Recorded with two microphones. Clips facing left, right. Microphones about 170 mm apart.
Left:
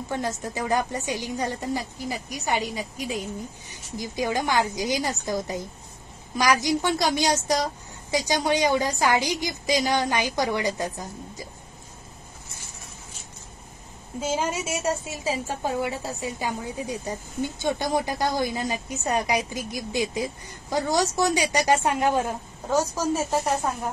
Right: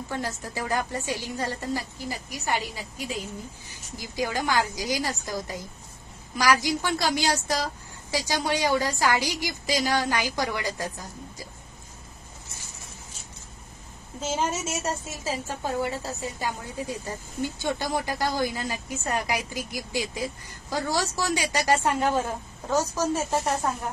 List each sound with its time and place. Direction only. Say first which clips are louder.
0.1 s a woman's voice: left 4 dB; 20° left (ahead or behind)
14.2 s a woman's voice: left 1 dB; 10° left (ahead or behind)